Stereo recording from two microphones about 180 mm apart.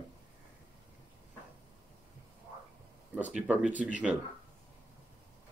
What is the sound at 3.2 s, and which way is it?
Speech, 10° right (ahead or behind).